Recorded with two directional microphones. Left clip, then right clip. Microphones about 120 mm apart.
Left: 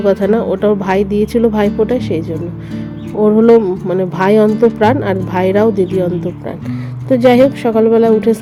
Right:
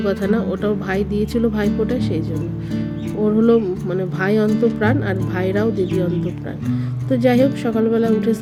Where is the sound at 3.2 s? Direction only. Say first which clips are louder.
Left 8 dB; 30° left (ahead or behind).